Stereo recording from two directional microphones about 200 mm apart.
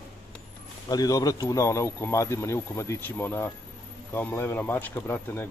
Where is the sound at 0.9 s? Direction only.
20° left (ahead or behind).